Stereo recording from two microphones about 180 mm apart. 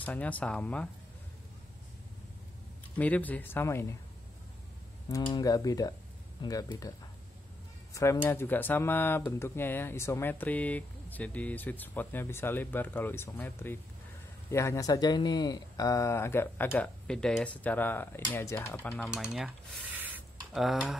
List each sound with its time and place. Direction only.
0.0 s speech: 10° left (ahead or behind)
3.0 s speech: 10° left (ahead or behind)
5.1 s speech: 25° left (ahead or behind)
7.9 s speech: 15° left (ahead or behind); by 21.0 s centre (ahead or behind)